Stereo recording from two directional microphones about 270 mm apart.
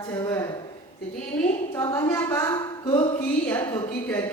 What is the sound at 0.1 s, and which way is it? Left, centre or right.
Speech, centre.